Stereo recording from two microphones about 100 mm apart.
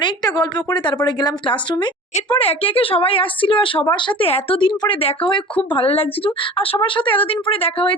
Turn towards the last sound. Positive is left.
turn(degrees=65)  # may be behind; listen again after turning